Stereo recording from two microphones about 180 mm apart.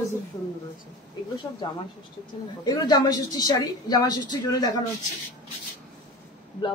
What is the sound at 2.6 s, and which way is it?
Speech, 25° left (ahead or behind).